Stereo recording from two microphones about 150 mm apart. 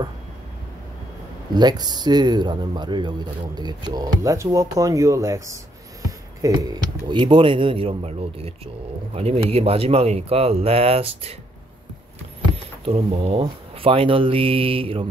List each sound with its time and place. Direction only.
1.5 s speech: 30° right (ahead or behind)
12.8 s speech: 35° right (ahead or behind)